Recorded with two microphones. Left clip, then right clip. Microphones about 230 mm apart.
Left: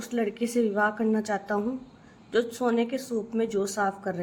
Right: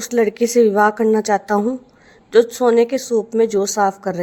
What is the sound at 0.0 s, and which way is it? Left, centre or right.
Speech, right.